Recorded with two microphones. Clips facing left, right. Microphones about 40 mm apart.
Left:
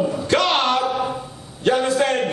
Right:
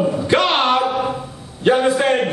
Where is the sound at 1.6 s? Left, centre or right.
Centre.